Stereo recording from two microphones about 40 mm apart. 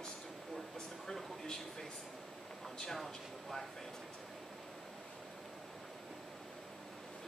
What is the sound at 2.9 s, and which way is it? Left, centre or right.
Speech, centre.